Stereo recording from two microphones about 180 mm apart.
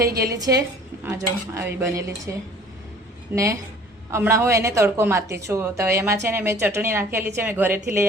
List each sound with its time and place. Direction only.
0.2 s a woman's voice: 20° right (ahead or behind)
3.3 s a woman's voice: 15° right (ahead or behind)